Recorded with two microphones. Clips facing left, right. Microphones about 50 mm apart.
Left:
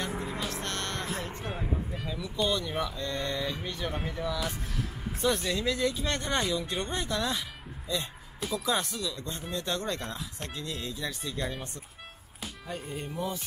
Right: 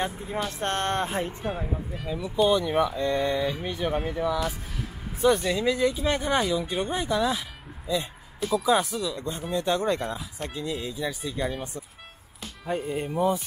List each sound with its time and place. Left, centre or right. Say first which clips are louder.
0.6 s speech: right 8 dB; right
1.3 s speech: right 4 dB; centre
2.0 s speech: right 8 dB; centre
12.6 s speech: right 10 dB; right